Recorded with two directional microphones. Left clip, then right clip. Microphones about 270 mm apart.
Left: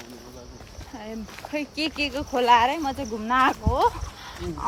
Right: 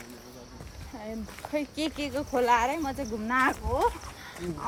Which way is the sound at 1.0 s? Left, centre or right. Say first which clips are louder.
Left 1 dB; centre.